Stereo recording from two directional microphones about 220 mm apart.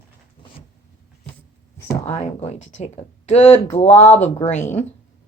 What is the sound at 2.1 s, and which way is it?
Speech, 30° left (ahead or behind).